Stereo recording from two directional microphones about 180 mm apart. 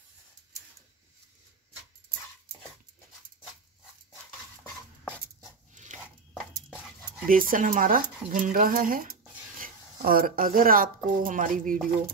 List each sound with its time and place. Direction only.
5.0 s dog: 10° right (ahead or behind)
5.8 s chopping: 45° right (ahead or behind)
7.2 s speech: 50° right (ahead or behind)